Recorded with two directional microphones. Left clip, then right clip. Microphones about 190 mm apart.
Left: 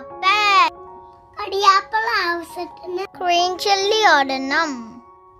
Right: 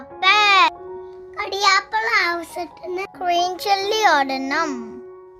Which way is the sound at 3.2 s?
10° left (ahead or behind).